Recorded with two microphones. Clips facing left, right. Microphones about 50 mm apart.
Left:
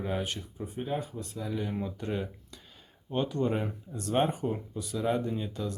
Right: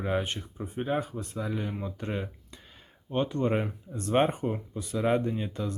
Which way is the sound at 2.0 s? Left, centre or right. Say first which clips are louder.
Even; right.